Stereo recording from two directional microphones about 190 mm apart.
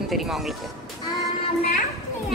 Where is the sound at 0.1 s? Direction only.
Centre (ahead or behind).